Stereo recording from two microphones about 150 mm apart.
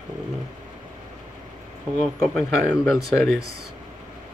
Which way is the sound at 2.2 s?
5° right (ahead or behind).